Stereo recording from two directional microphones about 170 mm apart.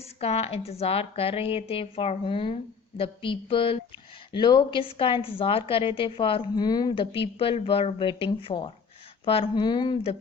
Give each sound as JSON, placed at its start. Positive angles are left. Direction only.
{"t": 0.0, "sound": "a woman's voice", "side_deg": 35}